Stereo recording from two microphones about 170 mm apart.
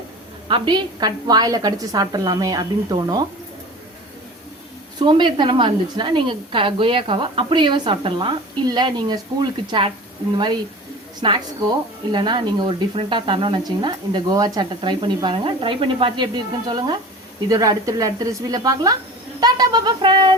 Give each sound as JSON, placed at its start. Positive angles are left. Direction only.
{"t": 0.4, "sound": "a woman's voice", "side_deg": -30}
{"t": 4.9, "sound": "a woman's voice", "side_deg": -30}